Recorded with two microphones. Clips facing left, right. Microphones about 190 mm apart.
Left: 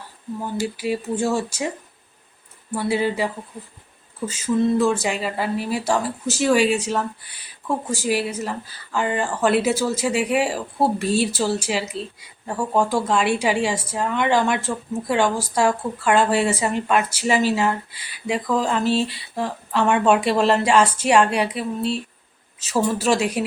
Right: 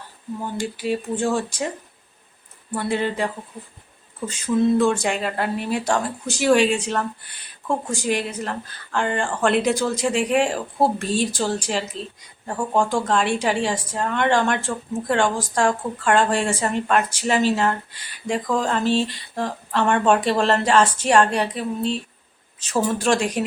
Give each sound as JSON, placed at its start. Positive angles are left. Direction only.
{"t": 0.5, "sound": "speech", "side_deg": 5}
{"t": 2.7, "sound": "speech", "side_deg": 5}
{"t": 4.3, "sound": "speech", "side_deg": 5}